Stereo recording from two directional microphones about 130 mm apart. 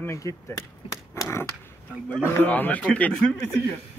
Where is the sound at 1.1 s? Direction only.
25° left (ahead or behind).